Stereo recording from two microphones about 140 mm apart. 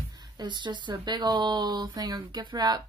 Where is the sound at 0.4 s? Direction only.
30° right (ahead or behind).